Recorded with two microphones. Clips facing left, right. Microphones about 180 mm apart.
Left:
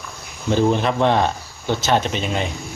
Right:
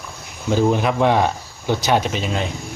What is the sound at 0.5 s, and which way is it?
Speech, 5° right (ahead or behind).